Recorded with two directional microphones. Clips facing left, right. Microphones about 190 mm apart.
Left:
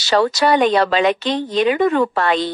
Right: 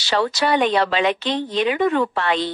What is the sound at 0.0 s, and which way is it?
Speech, 40° left (ahead or behind).